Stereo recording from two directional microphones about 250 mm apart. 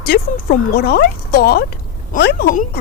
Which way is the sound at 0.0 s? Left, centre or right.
Left.